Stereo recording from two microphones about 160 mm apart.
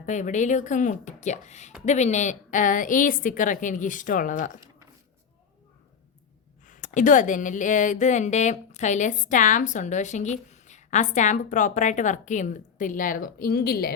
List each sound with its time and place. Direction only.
0.0 s a woman's voice: 50° left (ahead or behind)
6.7 s speech: 50° left (ahead or behind); by 13.9 s 70° left (ahead or behind)